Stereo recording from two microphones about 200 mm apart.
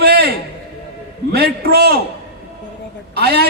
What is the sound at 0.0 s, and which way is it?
Music, 50° right (ahead or behind).